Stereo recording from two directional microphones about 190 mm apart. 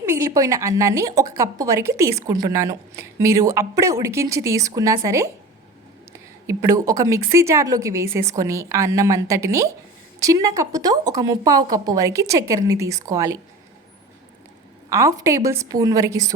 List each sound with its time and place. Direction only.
0.0 s a woman's voice: 15° right (ahead or behind)
14.8 s a woman's voice: 15° right (ahead or behind)